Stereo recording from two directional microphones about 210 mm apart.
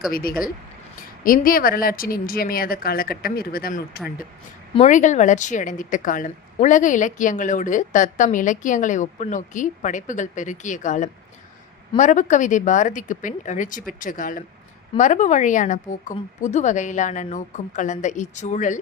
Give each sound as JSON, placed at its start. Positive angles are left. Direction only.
{"t": 0.1, "sound": "a woman's voice", "side_deg": 45}